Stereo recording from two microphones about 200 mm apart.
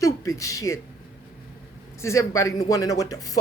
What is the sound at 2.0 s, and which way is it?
Speech, 15° left (ahead or behind).